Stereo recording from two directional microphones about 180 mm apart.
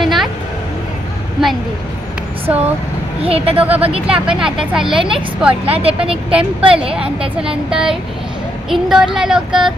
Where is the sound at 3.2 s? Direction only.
35° right (ahead or behind).